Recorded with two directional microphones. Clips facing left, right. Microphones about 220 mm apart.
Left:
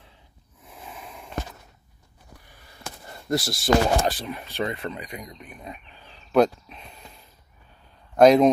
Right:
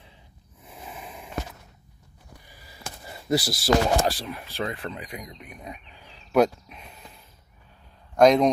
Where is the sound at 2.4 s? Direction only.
5° right (ahead or behind).